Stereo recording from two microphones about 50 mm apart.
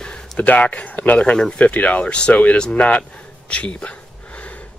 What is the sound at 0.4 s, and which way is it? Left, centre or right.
Speech, left.